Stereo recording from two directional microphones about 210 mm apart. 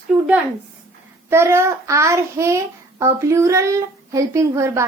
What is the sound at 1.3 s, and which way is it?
A woman's voice, 10° right (ahead or behind).